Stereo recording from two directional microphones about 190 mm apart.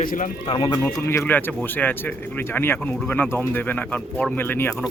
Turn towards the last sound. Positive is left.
turn(degrees=10)  # may be behind; listen again after turning